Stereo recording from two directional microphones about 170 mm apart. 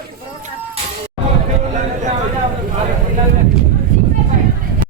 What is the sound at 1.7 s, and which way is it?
Vehicle, 45° right (ahead or behind).